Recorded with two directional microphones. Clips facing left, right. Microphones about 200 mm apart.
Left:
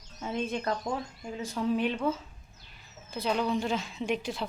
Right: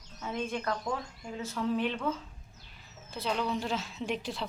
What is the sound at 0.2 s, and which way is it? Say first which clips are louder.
Speech: left 2 dB; 20° left (ahead or behind).